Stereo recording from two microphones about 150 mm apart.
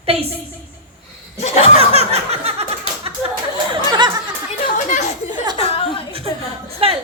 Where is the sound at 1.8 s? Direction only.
45° right (ahead or behind).